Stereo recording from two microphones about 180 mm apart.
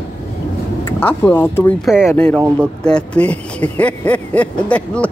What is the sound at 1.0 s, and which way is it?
Speech, 10° left (ahead or behind).